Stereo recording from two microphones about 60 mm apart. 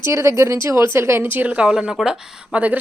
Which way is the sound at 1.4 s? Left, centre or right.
Centre.